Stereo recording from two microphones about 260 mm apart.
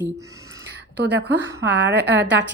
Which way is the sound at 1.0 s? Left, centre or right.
Right.